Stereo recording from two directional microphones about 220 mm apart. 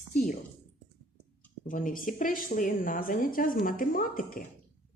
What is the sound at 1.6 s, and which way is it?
A woman's voice, 40° left (ahead or behind).